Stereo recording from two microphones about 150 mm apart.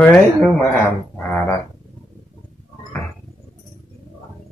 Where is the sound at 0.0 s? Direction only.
5° left (ahead or behind).